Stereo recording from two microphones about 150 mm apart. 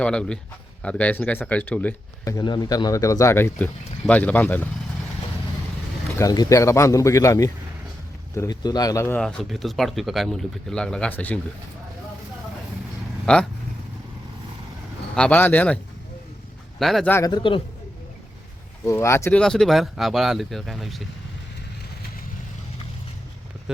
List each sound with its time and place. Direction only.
0.0 s speech: 5° left (ahead or behind)
2.2 s speech: 25° left (ahead or behind)
6.1 s speech: 25° left (ahead or behind)
9.1 s speech: 5° left (ahead or behind)
13.3 s speech: 5° left (ahead or behind)
15.1 s speech: 10° left (ahead or behind)
16.8 s speech: centre (ahead or behind)
17.1 s speech: 15° left (ahead or behind)
17.3 s a man's voice: 35° left (ahead or behind)
18.9 s speech: 20° left (ahead or behind)
19.4 s speech: 5° left (ahead or behind)
23.7 s speech: 5° right (ahead or behind)